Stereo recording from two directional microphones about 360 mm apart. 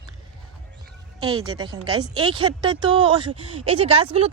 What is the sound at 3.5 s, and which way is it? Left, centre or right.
Speech, right.